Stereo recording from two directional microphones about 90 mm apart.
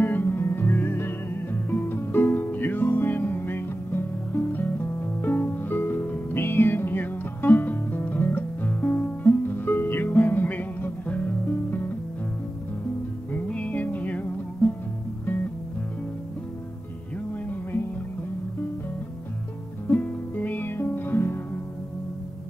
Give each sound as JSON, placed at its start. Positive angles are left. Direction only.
{"t": 0.0, "sound": "music", "side_deg": 20}
{"t": 5.2, "sound": "music", "side_deg": 20}
{"t": 13.3, "sound": "music", "side_deg": 15}
{"t": 19.9, "sound": "music", "side_deg": 20}